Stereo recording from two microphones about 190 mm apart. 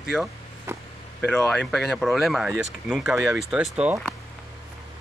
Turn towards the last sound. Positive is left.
turn(degrees=-5)  # may be behind; listen again after turning